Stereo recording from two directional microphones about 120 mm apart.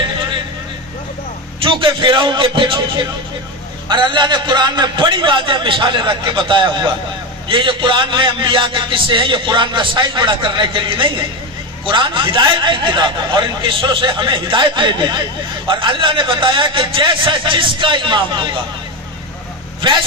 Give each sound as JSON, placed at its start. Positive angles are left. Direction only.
{"t": 1.6, "sound": "a man's voice", "side_deg": -45}